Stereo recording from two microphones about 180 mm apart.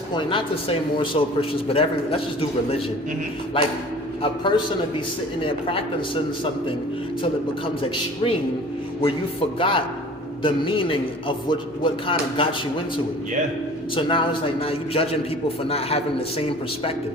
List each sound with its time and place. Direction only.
0.1 s a man's voice: 25° left (ahead or behind)
7.8 s a man's voice: 30° left (ahead or behind)
9.6 s a man's voice: 30° left (ahead or behind)
13.9 s a man's voice: 30° left (ahead or behind)